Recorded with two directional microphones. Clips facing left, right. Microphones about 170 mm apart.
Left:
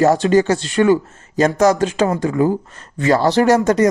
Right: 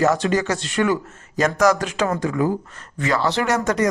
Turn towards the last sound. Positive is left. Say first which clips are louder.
# left 7 dB
turn(degrees=30)  # may be behind; listen again after turning